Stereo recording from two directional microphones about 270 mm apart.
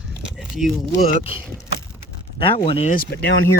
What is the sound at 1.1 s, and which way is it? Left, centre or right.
Speech, left.